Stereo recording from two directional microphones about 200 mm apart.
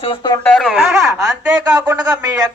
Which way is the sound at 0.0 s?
25° left (ahead or behind).